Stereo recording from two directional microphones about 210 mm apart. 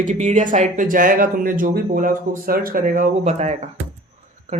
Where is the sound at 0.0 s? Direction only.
35° right (ahead or behind).